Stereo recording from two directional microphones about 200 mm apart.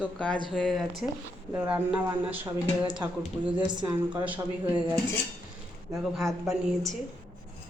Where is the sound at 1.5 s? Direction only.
10° right (ahead or behind).